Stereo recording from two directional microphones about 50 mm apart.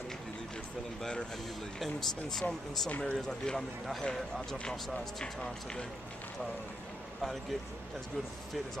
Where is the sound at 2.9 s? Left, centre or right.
Left.